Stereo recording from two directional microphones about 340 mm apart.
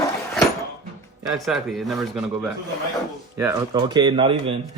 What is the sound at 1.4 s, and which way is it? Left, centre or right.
Speech, centre.